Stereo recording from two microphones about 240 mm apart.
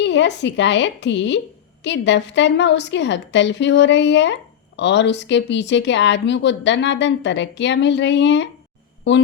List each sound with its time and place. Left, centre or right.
0.0 s speech: left